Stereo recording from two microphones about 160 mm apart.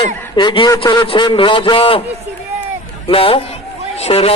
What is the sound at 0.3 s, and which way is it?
A man's voice, 30° left (ahead or behind).